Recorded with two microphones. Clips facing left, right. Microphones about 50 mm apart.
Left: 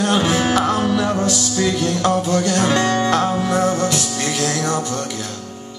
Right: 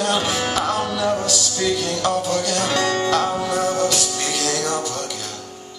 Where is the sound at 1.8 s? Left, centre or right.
Left.